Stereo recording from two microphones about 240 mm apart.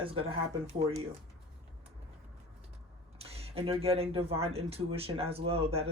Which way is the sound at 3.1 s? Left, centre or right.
Right.